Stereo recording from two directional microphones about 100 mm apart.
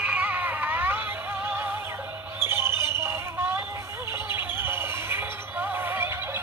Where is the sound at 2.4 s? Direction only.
25° right (ahead or behind).